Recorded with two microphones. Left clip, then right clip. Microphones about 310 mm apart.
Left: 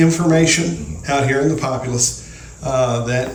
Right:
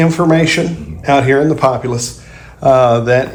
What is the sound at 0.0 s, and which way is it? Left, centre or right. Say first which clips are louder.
Speech: right 3 dB; centre.